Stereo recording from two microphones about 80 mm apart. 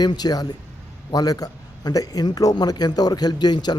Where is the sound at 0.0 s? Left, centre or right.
Left.